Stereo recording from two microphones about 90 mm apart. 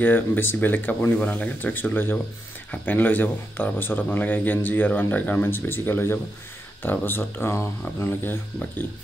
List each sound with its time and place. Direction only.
0.0 s a man's voice: 20° left (ahead or behind)